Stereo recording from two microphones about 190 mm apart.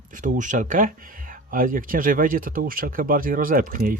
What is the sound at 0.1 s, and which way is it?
Speech, 40° right (ahead or behind).